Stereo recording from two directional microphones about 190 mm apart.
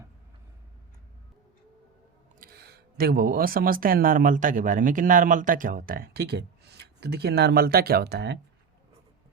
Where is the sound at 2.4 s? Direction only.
55° right (ahead or behind).